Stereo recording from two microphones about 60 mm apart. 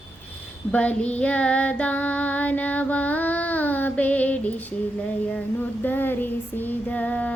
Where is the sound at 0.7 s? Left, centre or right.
Left.